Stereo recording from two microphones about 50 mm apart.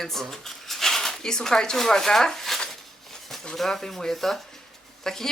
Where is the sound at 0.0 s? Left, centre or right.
Centre.